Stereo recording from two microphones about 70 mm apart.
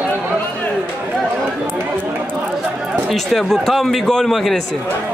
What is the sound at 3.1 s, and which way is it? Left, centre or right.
A man's voice, centre.